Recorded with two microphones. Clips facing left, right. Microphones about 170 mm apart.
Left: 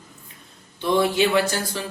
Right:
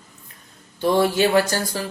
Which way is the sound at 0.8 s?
40° right (ahead or behind).